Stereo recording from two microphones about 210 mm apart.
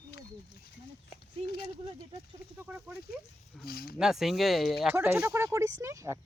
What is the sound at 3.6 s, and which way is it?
Speech, 45° left (ahead or behind).